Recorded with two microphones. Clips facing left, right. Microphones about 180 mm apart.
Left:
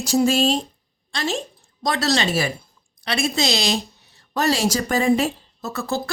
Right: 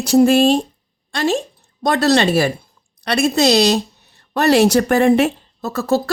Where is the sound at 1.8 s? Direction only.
60° right (ahead or behind).